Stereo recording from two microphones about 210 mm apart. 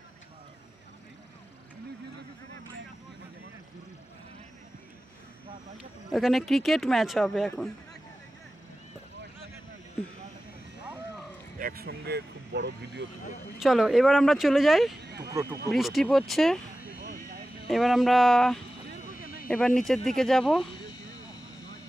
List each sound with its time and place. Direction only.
5.8 s speech: centre (ahead or behind)
11.5 s speech: 45° right (ahead or behind)
13.6 s speech: centre (ahead or behind)
15.0 s a sound: 50° right (ahead or behind)
15.7 s speech: centre (ahead or behind)
17.0 s vehicle: 40° right (ahead or behind)
17.6 s speech: centre (ahead or behind)
19.8 s speech: centre (ahead or behind)